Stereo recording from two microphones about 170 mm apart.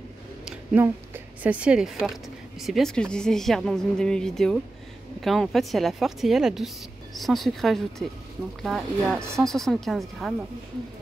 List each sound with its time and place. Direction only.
0.5 s a woman's voice: 10° right (ahead or behind)